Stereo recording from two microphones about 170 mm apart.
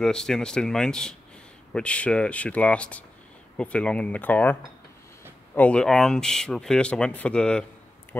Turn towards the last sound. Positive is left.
turn(degrees=5)  # may be behind; listen again after turning